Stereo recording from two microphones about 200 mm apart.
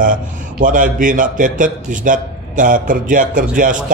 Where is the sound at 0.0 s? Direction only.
40° right (ahead or behind).